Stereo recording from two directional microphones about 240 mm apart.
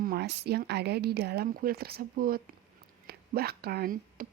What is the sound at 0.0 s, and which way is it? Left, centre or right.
A woman's voice, right.